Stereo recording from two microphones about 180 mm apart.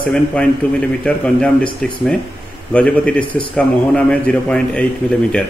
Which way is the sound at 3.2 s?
30° left (ahead or behind).